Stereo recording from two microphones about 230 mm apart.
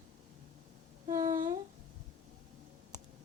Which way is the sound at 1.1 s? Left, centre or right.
Centre.